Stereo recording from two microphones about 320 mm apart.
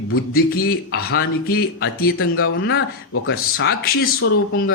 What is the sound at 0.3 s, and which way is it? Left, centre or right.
Speech, left.